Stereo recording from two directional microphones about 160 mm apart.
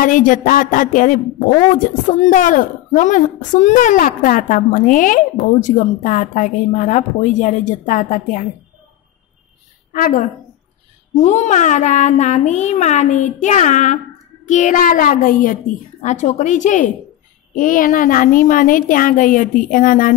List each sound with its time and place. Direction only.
0.0 s a woman's voice: 55° left (ahead or behind)
9.9 s a woman's voice: 65° left (ahead or behind)
11.1 s a woman's voice: 45° left (ahead or behind)